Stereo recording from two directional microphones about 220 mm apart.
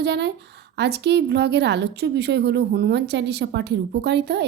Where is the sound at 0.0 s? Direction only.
50° right (ahead or behind).